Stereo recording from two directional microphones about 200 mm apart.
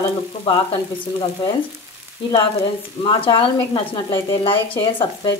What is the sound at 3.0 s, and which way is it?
Speech, 25° left (ahead or behind).